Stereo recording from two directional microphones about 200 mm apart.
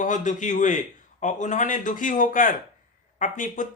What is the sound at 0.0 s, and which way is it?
Speech, 40° left (ahead or behind).